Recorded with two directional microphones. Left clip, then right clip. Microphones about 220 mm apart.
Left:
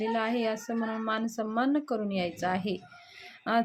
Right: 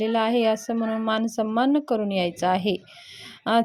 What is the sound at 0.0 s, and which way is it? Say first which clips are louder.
A woman's voice: right 8 dB; 30° right (ahead or behind).